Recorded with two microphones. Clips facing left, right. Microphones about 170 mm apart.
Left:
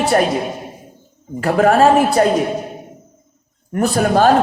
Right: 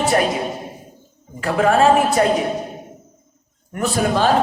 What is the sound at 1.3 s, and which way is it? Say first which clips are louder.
Speech: left 3 dB; 40° left (ahead or behind).